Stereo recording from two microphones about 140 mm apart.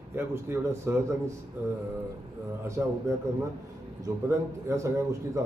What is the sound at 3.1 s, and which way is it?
Speech, 20° right (ahead or behind).